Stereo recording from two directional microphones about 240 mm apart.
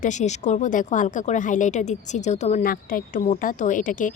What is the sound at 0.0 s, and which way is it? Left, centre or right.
A woman's voice, left.